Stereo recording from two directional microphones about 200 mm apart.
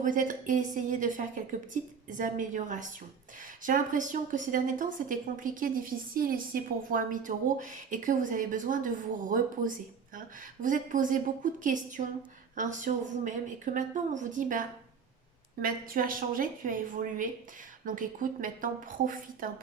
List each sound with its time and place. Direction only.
0.0 s a woman's voice: 40° right (ahead or behind)